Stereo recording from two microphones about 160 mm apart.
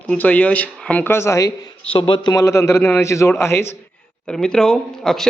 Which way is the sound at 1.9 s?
30° left (ahead or behind).